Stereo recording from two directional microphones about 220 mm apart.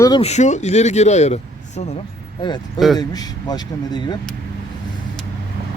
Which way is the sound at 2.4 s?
20° left (ahead or behind).